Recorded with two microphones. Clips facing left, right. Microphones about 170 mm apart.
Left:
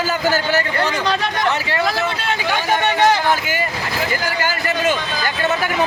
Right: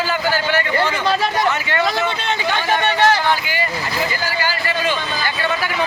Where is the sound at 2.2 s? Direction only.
10° left (ahead or behind).